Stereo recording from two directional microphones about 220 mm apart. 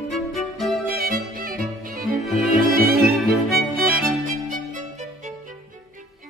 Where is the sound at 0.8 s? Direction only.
40° right (ahead or behind).